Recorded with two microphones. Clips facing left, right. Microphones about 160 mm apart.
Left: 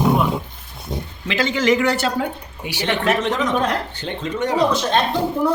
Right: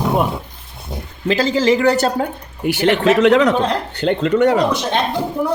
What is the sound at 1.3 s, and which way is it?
Speech, 35° right (ahead or behind).